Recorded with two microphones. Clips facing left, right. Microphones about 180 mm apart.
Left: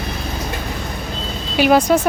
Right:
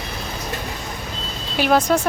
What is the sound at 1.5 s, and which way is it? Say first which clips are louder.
Speech: left 4 dB; 5° left (ahead or behind).